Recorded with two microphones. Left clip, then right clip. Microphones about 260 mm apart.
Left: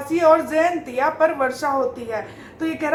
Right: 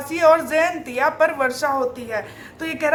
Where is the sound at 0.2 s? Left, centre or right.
Right.